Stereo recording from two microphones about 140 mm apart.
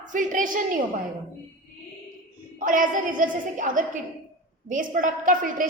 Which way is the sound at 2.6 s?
75° right (ahead or behind).